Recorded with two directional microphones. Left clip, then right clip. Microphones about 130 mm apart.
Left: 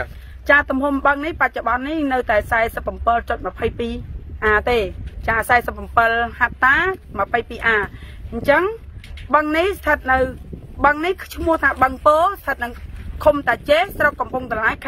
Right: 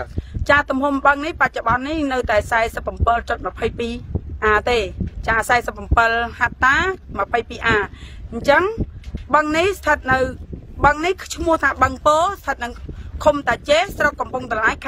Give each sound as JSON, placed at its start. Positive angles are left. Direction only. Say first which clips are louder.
{"t": 0.5, "sound": "speech", "louder": "left 1 dB", "side_deg": -35}
{"t": 11.8, "sound": "speech", "louder": "left 1 dB", "side_deg": -5}
{"t": 12.1, "sound": "speech", "louder": "left 3 dB", "side_deg": -30}